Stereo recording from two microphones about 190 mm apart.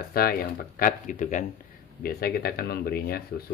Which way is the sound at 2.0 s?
55° left (ahead or behind).